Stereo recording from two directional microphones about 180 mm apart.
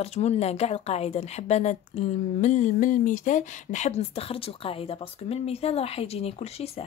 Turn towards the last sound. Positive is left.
turn(degrees=35)  # may be behind; listen again after turning